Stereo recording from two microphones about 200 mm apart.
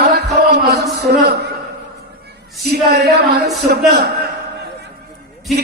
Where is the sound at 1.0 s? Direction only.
55° right (ahead or behind).